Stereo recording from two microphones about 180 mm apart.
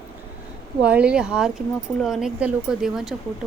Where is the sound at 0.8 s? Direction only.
5° right (ahead or behind).